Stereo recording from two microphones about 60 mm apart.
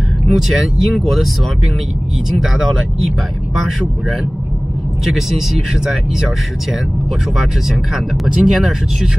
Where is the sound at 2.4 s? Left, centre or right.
Centre.